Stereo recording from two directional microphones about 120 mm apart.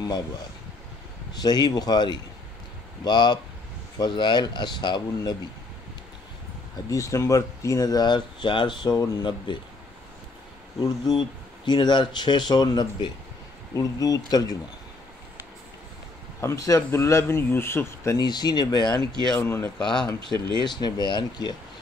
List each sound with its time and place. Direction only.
1.3 s speech: 35° left (ahead or behind)
6.9 s speech: 25° left (ahead or behind)
10.8 s speech: 35° left (ahead or behind)
16.3 s speech: 25° left (ahead or behind)
18.2 s speech: 35° left (ahead or behind)
19.3 s speech: 20° left (ahead or behind)
20.3 s speech: 40° right (ahead or behind)
20.6 s speech: 40° left (ahead or behind)